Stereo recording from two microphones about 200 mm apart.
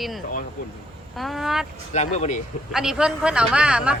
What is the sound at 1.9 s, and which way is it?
Speech, 35° left (ahead or behind).